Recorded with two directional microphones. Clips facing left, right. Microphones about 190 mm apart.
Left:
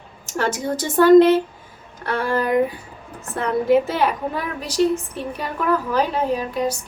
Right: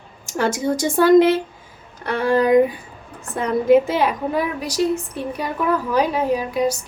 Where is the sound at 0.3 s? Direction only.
10° right (ahead or behind).